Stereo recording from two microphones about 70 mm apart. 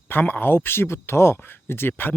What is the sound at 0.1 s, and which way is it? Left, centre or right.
Speech, left.